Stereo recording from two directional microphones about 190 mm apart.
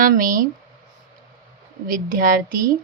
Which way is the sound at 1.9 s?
45° right (ahead or behind).